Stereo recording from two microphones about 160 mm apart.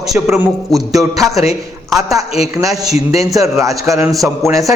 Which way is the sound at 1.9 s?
20° right (ahead or behind).